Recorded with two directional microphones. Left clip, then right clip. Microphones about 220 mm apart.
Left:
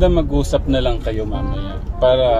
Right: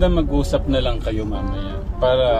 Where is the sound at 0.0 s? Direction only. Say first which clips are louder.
Left 3 dB; 25° left (ahead or behind).